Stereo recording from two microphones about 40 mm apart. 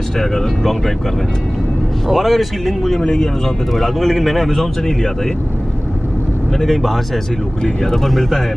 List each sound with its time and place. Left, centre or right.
0.2 s speech: centre
2.0 s speech: centre
3.7 s speech: centre
6.6 s speech: centre